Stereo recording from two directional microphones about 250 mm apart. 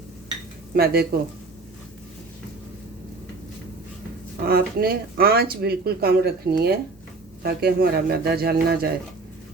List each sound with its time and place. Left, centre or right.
0.7 s speech: right
4.4 s speech: right